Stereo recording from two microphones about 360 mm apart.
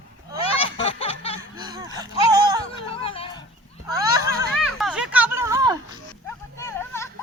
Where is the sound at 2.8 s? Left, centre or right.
Centre.